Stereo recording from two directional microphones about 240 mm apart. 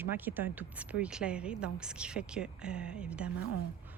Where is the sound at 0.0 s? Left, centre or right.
Centre.